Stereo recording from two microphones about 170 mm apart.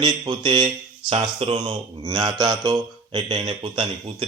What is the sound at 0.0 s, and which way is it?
Speech, 25° right (ahead or behind).